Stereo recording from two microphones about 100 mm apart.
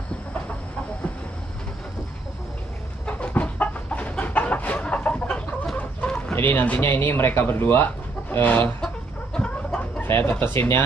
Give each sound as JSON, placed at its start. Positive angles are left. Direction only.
{"t": 3.1, "sound": "chicken", "side_deg": 10}
{"t": 6.3, "sound": "speech", "side_deg": 20}
{"t": 8.3, "sound": "chicken", "side_deg": 20}